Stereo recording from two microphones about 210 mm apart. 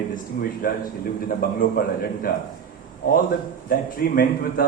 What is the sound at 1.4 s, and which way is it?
Speech, 45° left (ahead or behind).